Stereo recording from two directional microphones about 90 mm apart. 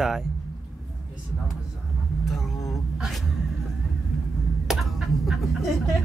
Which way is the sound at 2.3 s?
Centre (ahead or behind).